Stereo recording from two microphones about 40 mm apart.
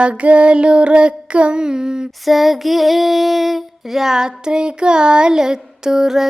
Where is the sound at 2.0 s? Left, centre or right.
Centre.